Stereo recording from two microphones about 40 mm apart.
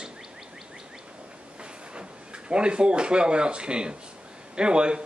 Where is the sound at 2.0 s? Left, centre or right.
Right.